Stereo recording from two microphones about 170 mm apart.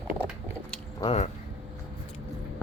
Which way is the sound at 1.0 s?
35° left (ahead or behind).